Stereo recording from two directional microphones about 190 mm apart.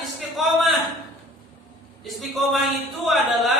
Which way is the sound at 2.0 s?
Centre (ahead or behind).